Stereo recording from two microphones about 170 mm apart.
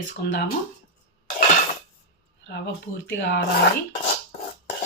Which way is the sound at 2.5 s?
90° left.